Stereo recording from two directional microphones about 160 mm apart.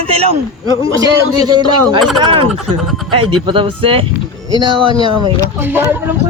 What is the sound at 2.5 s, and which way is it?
Speech, centre (ahead or behind).